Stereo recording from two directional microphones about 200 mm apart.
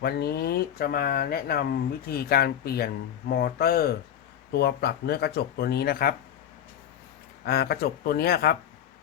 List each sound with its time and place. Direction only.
0.0 s speech: 55° left (ahead or behind)
7.4 s speech: 50° left (ahead or behind)